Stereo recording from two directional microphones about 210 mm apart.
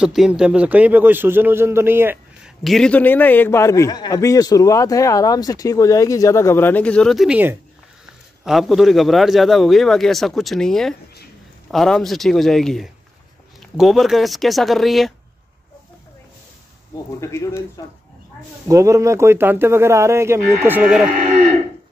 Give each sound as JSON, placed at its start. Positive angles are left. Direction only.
{"t": 0.0, "sound": "a man's voice", "side_deg": 0}
{"t": 17.2, "sound": "a man's voice", "side_deg": 15}
{"t": 18.7, "sound": "a man's voice", "side_deg": -15}